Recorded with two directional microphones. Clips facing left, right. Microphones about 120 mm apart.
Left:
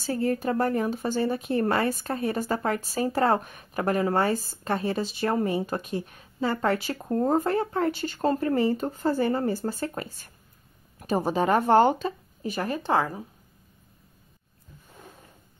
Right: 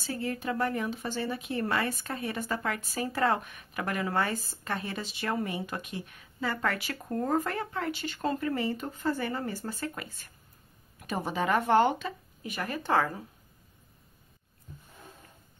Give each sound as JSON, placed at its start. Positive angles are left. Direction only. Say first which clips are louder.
{"t": 0.0, "sound": "speech", "louder": "left 7 dB", "side_deg": 40}